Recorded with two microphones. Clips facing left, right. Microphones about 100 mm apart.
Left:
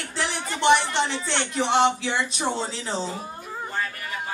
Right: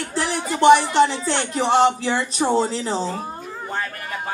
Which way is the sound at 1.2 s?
40° right (ahead or behind).